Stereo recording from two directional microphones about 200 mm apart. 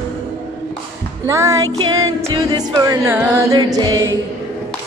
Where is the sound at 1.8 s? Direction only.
85° right.